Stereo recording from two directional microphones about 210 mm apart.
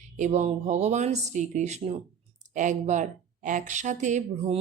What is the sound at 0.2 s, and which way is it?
Speech, 30° right (ahead or behind).